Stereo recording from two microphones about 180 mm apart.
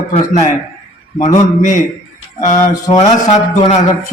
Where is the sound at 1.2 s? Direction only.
45° left (ahead or behind).